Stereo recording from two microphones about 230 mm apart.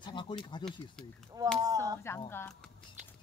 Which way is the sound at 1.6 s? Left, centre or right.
Centre.